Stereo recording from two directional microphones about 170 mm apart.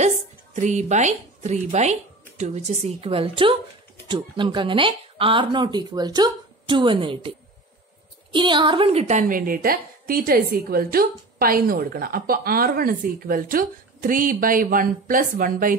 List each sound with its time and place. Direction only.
0.6 s a woman's voice: 45° right (ahead or behind)
9.5 s a woman's voice: 60° right (ahead or behind)